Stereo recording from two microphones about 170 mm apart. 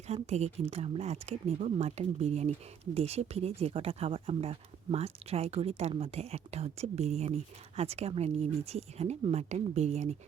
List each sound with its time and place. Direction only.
0.1 s speech: 40° right (ahead or behind)